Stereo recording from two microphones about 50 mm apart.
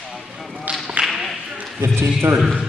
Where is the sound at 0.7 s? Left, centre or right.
Right.